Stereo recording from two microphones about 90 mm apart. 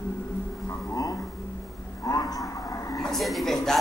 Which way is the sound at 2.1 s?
40° left (ahead or behind).